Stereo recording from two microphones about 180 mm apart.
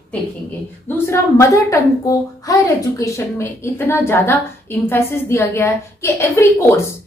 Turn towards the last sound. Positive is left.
turn(degrees=15)  # may be behind; listen again after turning